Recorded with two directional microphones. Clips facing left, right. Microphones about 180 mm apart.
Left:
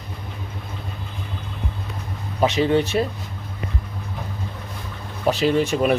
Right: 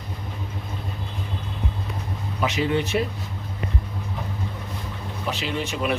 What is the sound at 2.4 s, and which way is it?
Speech, 35° left (ahead or behind).